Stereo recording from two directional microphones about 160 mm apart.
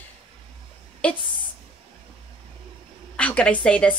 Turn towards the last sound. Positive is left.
turn(degrees=5)  # may be behind; listen again after turning